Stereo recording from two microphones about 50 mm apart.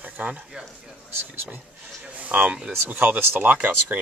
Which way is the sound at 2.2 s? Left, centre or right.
Right.